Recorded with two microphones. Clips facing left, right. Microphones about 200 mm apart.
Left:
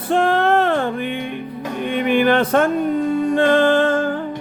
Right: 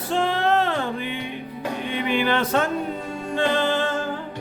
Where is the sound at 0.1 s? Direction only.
55° left (ahead or behind).